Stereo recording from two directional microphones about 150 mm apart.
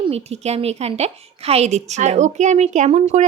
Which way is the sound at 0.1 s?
45° right (ahead or behind).